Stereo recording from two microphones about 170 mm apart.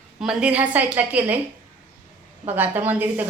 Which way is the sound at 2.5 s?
10° right (ahead or behind).